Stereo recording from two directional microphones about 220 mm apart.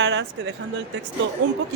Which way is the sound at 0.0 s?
50° right (ahead or behind).